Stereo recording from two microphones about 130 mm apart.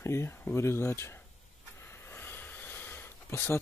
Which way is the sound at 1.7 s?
20° left (ahead or behind).